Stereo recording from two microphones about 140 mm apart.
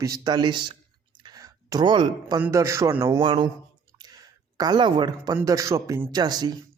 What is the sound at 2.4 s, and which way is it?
Speech, 20° right (ahead or behind).